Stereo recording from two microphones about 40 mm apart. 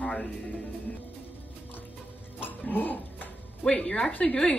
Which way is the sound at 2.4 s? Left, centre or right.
Left.